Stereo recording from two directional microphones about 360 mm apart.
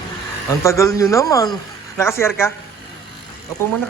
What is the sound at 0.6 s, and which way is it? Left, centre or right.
A man's voice, centre.